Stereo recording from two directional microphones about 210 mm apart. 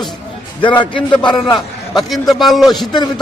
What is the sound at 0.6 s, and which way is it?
Speech, 20° left (ahead or behind).